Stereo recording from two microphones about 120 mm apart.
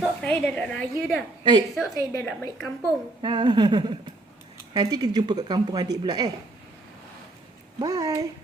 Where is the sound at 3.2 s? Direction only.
40° right (ahead or behind).